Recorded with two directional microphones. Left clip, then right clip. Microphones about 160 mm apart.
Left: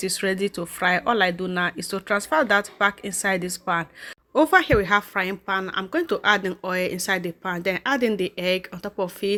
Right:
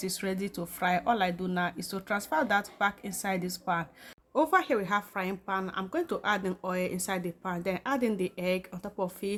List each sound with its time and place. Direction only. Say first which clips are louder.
0.0 s a woman's voice: left 10 dB; 25° left (ahead or behind)